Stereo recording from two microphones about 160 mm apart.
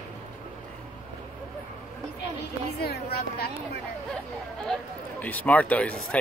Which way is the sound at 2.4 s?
90° left.